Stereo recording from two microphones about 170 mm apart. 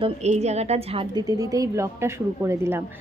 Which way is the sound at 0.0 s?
40° right (ahead or behind).